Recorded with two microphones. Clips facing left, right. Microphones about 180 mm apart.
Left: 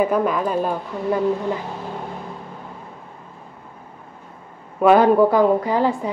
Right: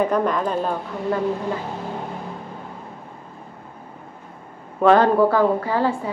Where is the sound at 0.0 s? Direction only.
5° left (ahead or behind).